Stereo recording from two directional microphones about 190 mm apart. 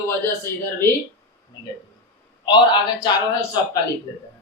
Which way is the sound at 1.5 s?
20° left (ahead or behind).